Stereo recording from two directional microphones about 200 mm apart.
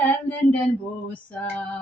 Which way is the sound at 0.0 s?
5° left (ahead or behind).